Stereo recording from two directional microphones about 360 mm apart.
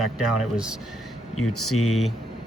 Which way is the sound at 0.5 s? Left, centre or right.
Centre.